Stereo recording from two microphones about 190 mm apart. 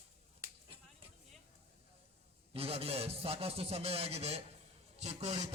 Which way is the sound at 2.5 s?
30° right (ahead or behind).